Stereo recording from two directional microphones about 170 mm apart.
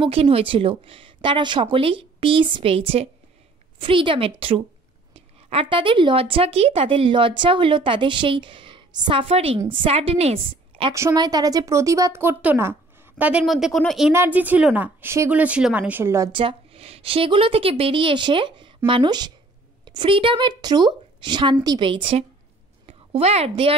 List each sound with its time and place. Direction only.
0.0 s a woman's voice: 35° right (ahead or behind)
10.9 s speech: 20° right (ahead or behind); by 14.1 s centre (ahead or behind)
14.1 s speech: 10° right (ahead or behind)
16.3 s a woman's voice: 30° right (ahead or behind)